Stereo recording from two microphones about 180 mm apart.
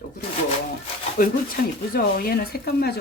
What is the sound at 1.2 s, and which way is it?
Speech, 50° left (ahead or behind).